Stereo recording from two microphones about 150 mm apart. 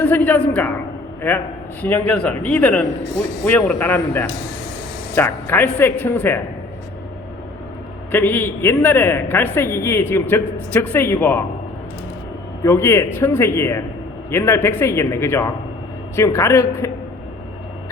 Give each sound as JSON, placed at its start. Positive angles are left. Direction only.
{"t": 0.0, "sound": "a woman's voice", "side_deg": 10}
{"t": 8.1, "sound": "a woman's voice", "side_deg": 10}
{"t": 12.6, "sound": "a woman's voice", "side_deg": 15}